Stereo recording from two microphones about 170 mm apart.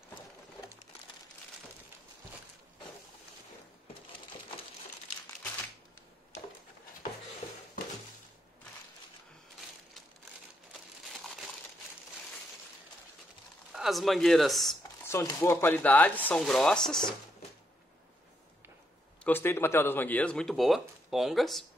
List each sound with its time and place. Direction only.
7.4 s a sound: 35° left (ahead or behind)
13.7 s speech: centre (ahead or behind)
15.0 s speech: 15° left (ahead or behind)
19.2 s speech: 10° left (ahead or behind)